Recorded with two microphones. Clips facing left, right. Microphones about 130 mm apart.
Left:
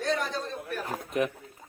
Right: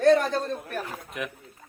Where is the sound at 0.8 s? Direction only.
35° left (ahead or behind).